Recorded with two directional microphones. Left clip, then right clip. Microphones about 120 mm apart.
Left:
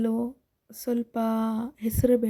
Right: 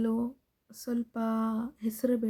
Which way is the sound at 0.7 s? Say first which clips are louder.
Left 6 dB; 30° left (ahead or behind).